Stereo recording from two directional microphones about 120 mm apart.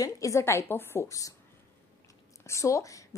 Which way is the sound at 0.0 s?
25° left (ahead or behind).